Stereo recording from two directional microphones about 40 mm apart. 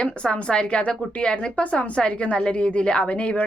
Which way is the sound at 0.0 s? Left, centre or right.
Left.